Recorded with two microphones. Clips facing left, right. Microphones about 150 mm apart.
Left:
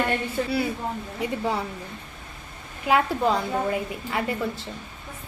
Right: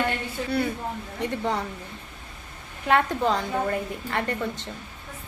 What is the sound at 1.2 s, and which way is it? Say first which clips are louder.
Speech: even; 5° left (ahead or behind).